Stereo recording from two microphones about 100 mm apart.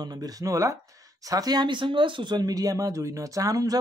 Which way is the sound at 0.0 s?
40° right (ahead or behind).